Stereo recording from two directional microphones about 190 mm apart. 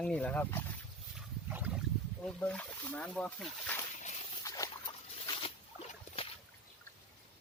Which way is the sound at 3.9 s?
35° left (ahead or behind).